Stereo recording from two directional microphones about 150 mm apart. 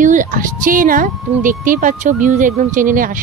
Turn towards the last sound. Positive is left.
turn(degrees=-60)  # may be behind; listen again after turning